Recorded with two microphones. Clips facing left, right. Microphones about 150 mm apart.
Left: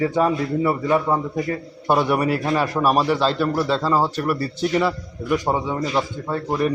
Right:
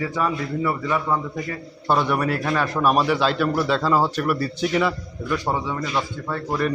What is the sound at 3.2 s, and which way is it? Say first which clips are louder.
A man's voice: left 1 dB; 30° left (ahead or behind).